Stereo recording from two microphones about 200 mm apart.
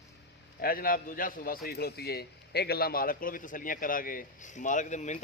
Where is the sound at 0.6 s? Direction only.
45° left (ahead or behind).